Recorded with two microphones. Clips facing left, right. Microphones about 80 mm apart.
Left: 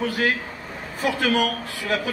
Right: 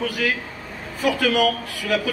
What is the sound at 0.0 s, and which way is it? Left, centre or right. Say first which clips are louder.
A man's voice: left 1 dB; left.